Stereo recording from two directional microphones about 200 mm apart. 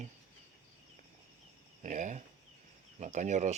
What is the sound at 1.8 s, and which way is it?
Speech, 35° right (ahead or behind).